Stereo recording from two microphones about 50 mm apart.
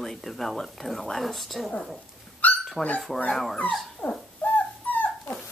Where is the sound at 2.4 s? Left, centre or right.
Left.